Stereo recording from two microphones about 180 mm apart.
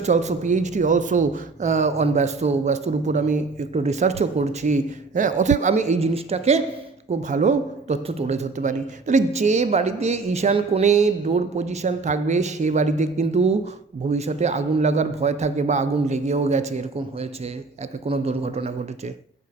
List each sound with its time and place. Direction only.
0.0 s a man's voice: 40° right (ahead or behind)